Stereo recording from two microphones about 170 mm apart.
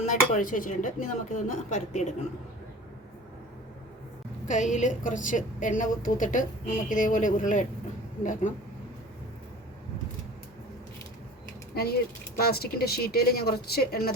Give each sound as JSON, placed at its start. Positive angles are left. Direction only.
{"t": 0.0, "sound": "a woman's voice", "side_deg": 50}
{"t": 4.4, "sound": "a woman's voice", "side_deg": 45}
{"t": 11.7, "sound": "speech", "side_deg": 65}